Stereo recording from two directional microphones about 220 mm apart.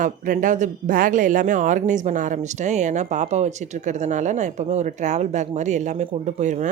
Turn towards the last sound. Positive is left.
turn(degrees=-30)  # may be behind; listen again after turning